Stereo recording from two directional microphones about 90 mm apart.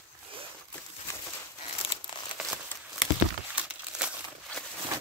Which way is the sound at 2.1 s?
60° left (ahead or behind).